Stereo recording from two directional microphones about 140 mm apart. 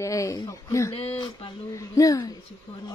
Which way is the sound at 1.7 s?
25° left (ahead or behind).